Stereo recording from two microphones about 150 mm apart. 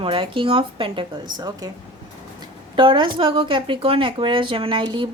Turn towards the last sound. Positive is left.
turn(degrees=-30)  # may be behind; listen again after turning